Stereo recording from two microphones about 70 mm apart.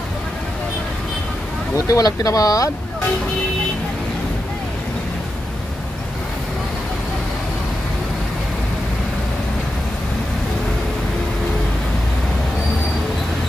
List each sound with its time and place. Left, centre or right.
1.9 s speech: left